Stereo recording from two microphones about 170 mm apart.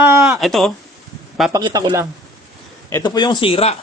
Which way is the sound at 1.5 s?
25° right (ahead or behind).